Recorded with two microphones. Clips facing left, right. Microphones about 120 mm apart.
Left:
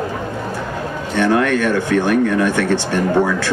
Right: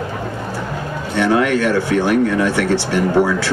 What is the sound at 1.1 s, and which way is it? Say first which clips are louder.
Speech: even; 15° right (ahead or behind).